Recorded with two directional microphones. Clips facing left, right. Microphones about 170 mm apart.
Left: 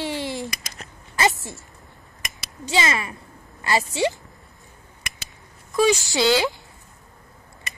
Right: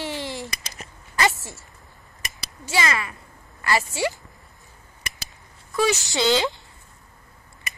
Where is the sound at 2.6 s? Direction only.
20° left (ahead or behind).